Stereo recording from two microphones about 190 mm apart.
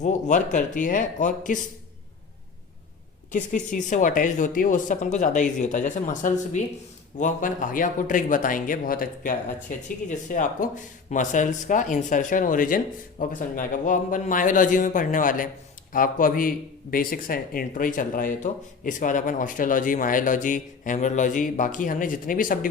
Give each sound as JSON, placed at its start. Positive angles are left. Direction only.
{"t": 0.0, "sound": "speech", "side_deg": 40}
{"t": 3.3, "sound": "speech", "side_deg": 40}